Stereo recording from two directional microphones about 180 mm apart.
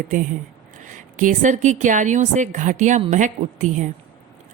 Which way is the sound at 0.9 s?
45° right (ahead or behind).